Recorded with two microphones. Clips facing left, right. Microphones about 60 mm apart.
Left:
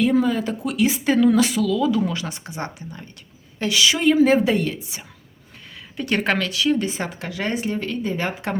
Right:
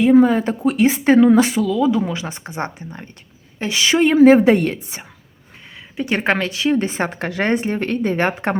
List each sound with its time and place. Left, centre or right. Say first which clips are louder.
0.0 s speech: right 6 dB; right
6.0 s speech: right 3 dB; right